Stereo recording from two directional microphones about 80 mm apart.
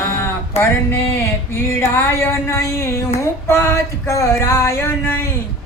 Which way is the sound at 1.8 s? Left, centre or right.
Left.